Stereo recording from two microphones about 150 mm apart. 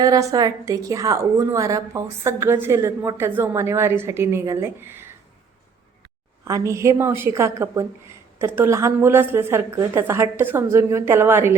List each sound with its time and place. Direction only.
0.0 s a woman's voice: 25° right (ahead or behind)
6.4 s a woman's voice: 20° right (ahead or behind)